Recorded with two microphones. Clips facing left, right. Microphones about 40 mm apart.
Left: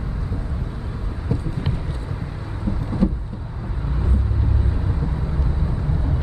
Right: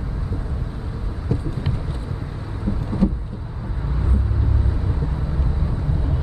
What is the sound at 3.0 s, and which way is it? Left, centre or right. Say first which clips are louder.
Vehicle: right 1 dB; centre.